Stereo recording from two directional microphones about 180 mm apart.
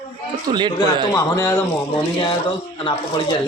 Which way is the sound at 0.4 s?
25° right (ahead or behind).